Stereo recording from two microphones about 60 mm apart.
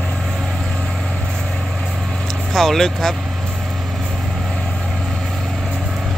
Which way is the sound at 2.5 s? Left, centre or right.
Centre.